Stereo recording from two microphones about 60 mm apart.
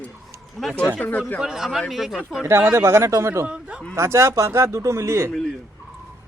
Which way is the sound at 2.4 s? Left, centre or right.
Right.